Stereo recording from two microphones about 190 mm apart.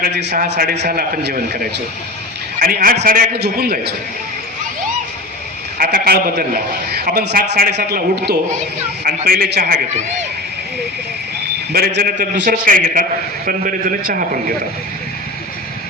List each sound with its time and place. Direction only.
0.0 s a man's voice: 65° right (ahead or behind)
2.6 s a man's voice: 50° right (ahead or behind)
5.7 s a man's voice: 50° right (ahead or behind)
11.7 s a man's voice: 55° right (ahead or behind)